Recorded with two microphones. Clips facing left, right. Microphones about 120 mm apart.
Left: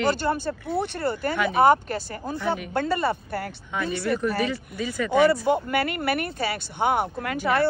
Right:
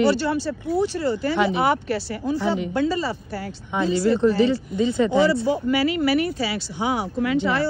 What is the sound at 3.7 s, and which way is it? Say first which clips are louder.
Speech: right 6 dB; 20° right (ahead or behind).